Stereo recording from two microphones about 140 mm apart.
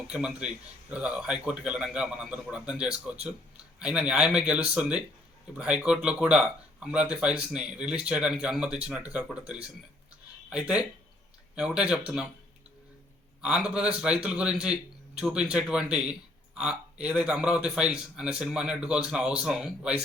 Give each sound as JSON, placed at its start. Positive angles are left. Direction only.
{"t": 0.1, "sound": "speech", "side_deg": -5}
{"t": 13.4, "sound": "speech", "side_deg": -5}